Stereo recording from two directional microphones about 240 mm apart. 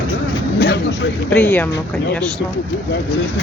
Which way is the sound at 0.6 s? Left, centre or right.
Left.